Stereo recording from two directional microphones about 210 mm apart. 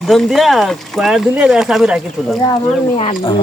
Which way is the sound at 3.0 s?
25° left (ahead or behind).